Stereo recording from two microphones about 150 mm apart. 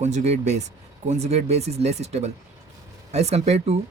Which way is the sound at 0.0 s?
50° right (ahead or behind).